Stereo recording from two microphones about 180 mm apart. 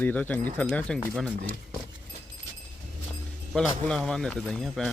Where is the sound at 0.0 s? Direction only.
10° left (ahead or behind).